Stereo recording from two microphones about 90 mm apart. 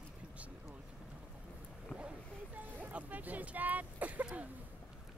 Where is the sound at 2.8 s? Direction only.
20° right (ahead or behind).